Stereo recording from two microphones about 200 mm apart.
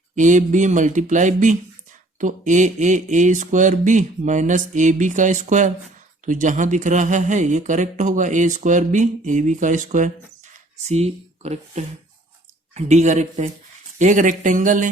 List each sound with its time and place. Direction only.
0.2 s speech: 40° right (ahead or behind)